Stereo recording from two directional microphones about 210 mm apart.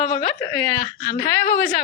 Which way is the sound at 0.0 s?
30° left (ahead or behind).